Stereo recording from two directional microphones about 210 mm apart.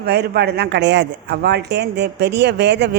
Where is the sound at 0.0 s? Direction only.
50° right (ahead or behind).